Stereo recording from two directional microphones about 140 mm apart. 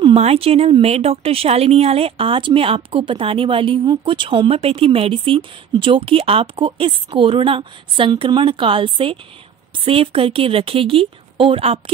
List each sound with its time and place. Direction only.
0.0 s speech: 45° right (ahead or behind)